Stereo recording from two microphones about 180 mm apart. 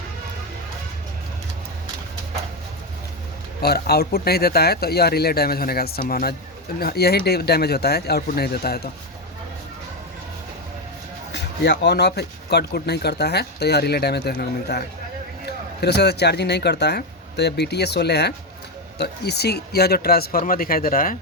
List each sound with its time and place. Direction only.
3.6 s speech: 60° left (ahead or behind)
11.3 s speech: 75° left (ahead or behind); by 21.2 s 50° left (ahead or behind)